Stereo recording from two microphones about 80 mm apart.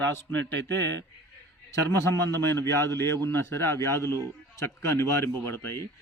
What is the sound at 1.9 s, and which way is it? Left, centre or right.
Speech, left.